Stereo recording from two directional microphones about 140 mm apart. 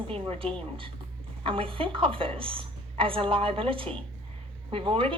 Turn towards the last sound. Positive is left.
turn(degrees=-40)  # may be behind; listen again after turning